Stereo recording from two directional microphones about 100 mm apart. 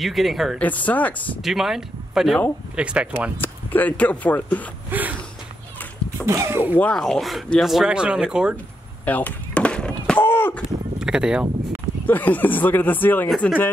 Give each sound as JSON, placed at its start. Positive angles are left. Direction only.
{"t": 0.0, "sound": "speech", "side_deg": 0}
{"t": 0.6, "sound": "speech", "side_deg": 15}
{"t": 1.4, "sound": "speech", "side_deg": -5}
{"t": 3.3, "sound": "speech", "side_deg": 20}
{"t": 4.9, "sound": "speech", "side_deg": -20}
{"t": 6.2, "sound": "speech", "side_deg": -30}
{"t": 6.8, "sound": "speech", "side_deg": 5}
{"t": 9.0, "sound": "a sound", "side_deg": 15}
{"t": 10.2, "sound": "a sound", "side_deg": 20}
{"t": 11.0, "sound": "speech", "side_deg": -5}
{"t": 12.1, "sound": "speech", "side_deg": 20}